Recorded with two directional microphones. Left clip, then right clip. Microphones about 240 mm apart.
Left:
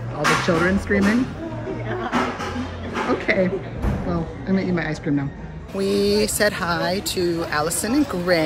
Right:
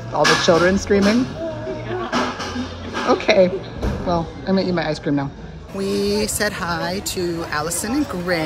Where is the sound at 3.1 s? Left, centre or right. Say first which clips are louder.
Right 7 dB; centre.